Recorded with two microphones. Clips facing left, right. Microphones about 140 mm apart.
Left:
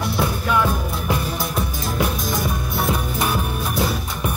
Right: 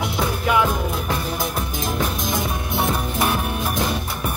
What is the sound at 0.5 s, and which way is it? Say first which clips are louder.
Music: right 3 dB; 15° right (ahead or behind).